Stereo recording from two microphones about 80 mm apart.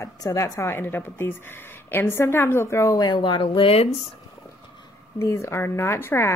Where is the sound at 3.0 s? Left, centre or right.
Left.